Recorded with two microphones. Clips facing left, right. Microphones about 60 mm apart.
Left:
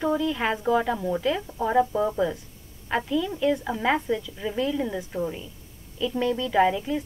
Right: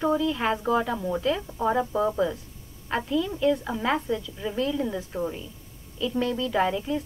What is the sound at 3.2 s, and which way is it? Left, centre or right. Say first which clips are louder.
A woman's voice: even; centre.